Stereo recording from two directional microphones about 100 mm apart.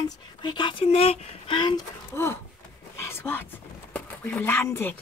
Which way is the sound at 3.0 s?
25° left (ahead or behind).